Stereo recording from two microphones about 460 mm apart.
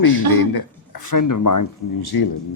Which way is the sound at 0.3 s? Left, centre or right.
Left.